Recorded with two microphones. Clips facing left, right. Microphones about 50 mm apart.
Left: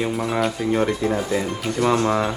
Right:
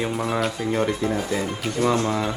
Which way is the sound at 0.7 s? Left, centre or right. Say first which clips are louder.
Left 2 dB; centre.